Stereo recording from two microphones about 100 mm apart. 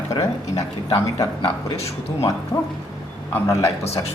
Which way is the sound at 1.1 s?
75° left (ahead or behind).